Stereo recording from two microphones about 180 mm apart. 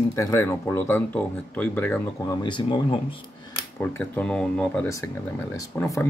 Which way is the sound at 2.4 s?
25° left (ahead or behind).